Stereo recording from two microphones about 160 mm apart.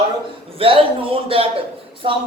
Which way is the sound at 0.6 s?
35° right (ahead or behind).